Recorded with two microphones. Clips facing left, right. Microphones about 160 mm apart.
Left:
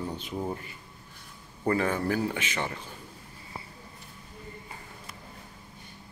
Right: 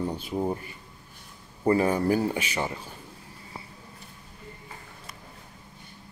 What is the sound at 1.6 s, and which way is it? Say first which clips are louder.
Speech: right 4 dB; 15° right (ahead or behind).